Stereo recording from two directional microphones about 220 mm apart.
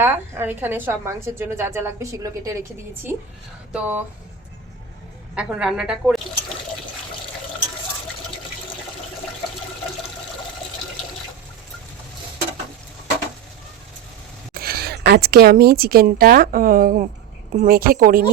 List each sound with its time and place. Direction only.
0.0 s a woman's voice: 10° right (ahead or behind)
5.3 s speech: 5° right (ahead or behind)
14.5 s speech: 45° right (ahead or behind)